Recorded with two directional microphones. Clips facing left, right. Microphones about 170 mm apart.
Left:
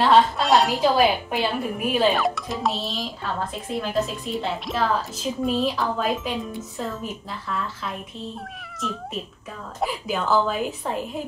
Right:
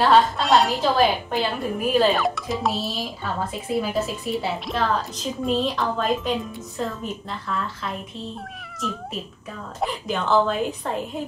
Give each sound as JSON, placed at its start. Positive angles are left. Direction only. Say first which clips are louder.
{"t": 0.0, "sound": "a woman's voice", "louder": "even", "side_deg": 0}
{"t": 9.8, "sound": "a woman's voice", "louder": "even", "side_deg": 5}